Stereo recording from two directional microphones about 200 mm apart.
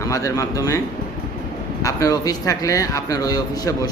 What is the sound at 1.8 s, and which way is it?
A man's voice, 15° left (ahead or behind).